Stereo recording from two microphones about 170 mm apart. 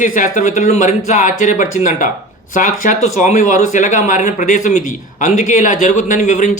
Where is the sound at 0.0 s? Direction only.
50° left (ahead or behind).